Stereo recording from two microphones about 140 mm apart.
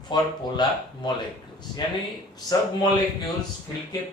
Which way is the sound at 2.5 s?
30° left (ahead or behind).